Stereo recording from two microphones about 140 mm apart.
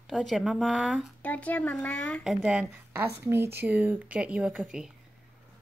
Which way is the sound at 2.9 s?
15° right (ahead or behind).